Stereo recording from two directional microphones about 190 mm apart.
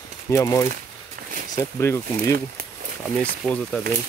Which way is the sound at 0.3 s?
15° left (ahead or behind).